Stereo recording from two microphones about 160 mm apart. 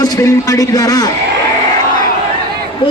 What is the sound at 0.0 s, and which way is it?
Speech, 20° left (ahead or behind).